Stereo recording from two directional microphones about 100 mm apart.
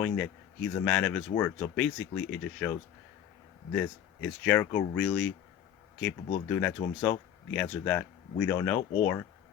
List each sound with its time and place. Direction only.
0.0 s speech: 10° left (ahead or behind)